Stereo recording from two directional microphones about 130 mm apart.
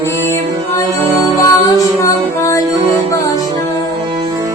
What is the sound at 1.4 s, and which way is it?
Music, 25° left (ahead or behind).